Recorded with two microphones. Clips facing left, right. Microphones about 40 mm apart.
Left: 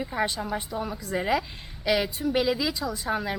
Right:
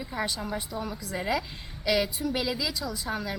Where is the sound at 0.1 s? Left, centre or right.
Centre.